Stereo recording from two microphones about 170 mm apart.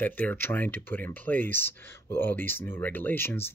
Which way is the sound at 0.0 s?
10° left (ahead or behind).